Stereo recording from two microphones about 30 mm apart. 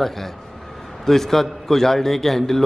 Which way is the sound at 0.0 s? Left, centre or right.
Centre.